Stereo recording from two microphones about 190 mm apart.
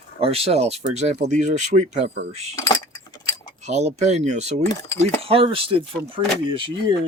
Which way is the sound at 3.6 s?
35° right (ahead or behind).